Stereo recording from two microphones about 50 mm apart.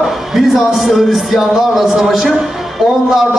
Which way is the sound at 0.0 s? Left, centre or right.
Centre.